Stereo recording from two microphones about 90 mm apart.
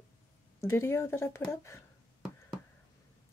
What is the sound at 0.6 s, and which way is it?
Speech, 30° left (ahead or behind).